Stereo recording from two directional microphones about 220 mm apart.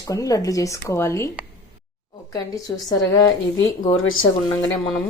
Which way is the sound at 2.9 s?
15° left (ahead or behind).